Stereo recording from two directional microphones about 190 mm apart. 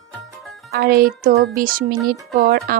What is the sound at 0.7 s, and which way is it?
Speech, 55° right (ahead or behind).